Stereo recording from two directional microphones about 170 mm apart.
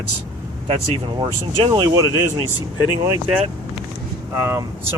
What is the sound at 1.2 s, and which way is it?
Speech, 25° right (ahead or behind).